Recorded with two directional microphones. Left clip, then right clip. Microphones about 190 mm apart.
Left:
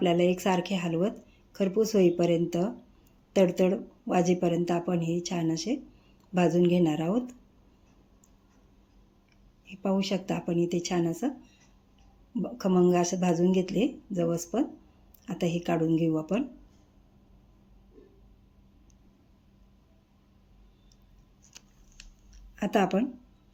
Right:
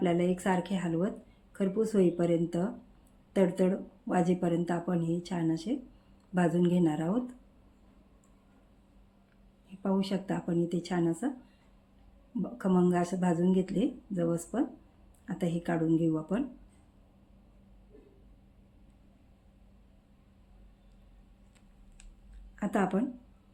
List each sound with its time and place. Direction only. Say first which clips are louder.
0.0 s a woman's voice: left 5 dB; 20° left (ahead or behind)
9.8 s a woman's voice: left 3 dB; 15° left (ahead or behind)
12.4 s a woman's voice: left 4 dB; 15° left (ahead or behind)
22.5 s speech: left 5 dB; 20° left (ahead or behind)